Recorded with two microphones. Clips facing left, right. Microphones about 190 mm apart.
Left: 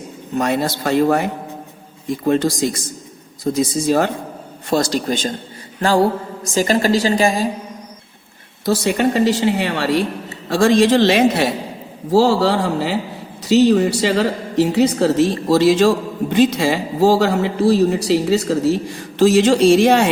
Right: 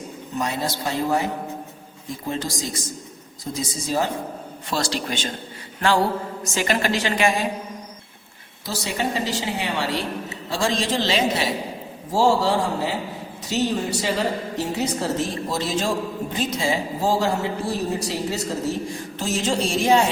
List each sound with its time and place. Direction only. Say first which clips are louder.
0.3 s a woman's voice: left 7 dB; 60° left (ahead or behind)
4.7 s a woman's voice: left 8 dB; 45° left (ahead or behind)
6.4 s a woman's voice: left 8 dB; 35° left (ahead or behind)
8.6 s a woman's voice: left 10 dB; 60° left (ahead or behind)